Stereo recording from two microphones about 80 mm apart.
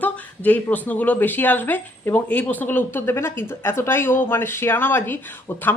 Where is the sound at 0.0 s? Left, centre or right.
Left.